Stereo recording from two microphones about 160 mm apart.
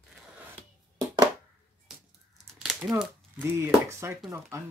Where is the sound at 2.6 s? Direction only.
Centre (ahead or behind).